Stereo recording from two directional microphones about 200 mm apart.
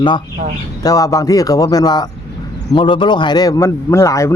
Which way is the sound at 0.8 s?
15° left (ahead or behind).